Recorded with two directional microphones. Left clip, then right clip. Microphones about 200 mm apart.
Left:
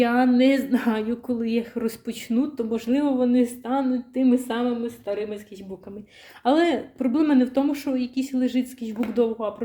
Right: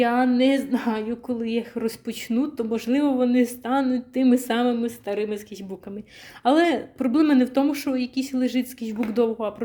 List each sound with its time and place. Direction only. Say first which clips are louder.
0.0 s a woman's voice: left 1 dB; 15° right (ahead or behind); by 5.4 s 45° right (ahead or behind)
6.4 s a woman's voice: right 1 dB; 15° right (ahead or behind)